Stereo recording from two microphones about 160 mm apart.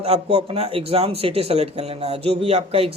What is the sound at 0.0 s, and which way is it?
Speech, 40° right (ahead or behind).